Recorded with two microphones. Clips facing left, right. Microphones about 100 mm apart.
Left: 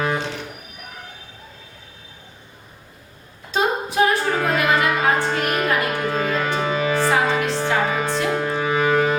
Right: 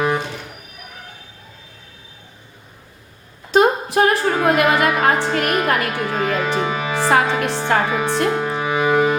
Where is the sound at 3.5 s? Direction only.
60° right (ahead or behind).